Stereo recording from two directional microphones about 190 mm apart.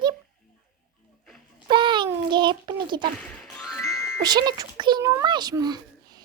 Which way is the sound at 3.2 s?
Centre (ahead or behind).